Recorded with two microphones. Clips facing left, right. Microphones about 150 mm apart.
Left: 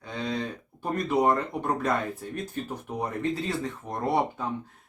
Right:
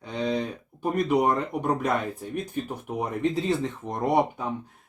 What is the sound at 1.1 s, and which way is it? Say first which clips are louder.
Speech: left 1 dB; 15° right (ahead or behind).